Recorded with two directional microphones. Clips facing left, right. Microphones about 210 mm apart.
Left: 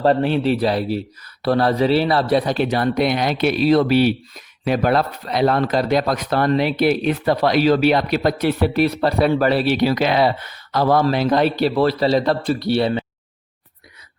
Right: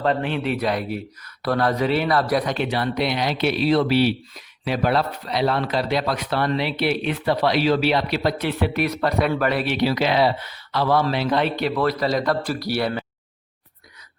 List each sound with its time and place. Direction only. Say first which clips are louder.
0.0 s speech: left 6 dB; 35° left (ahead or behind)
9.7 s speech: left 3 dB; 45° left (ahead or behind); by 13.1 s 25° left (ahead or behind)